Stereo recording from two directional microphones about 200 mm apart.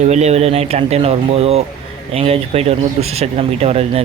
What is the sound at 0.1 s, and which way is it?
Speech, 35° right (ahead or behind).